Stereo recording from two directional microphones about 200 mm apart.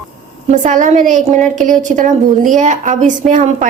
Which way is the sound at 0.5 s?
40° right (ahead or behind).